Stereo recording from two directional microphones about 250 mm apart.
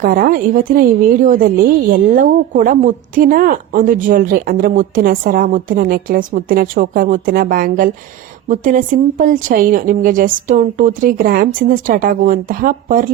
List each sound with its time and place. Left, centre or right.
0.0 s a woman's voice: right